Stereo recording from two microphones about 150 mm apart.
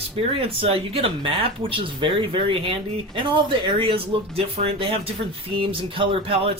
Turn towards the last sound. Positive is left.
turn(degrees=-35)  # may be behind; listen again after turning